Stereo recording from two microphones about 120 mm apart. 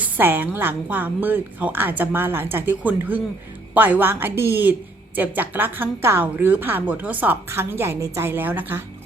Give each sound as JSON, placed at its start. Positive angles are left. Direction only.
{"t": 0.0, "sound": "a woman's voice", "side_deg": -15}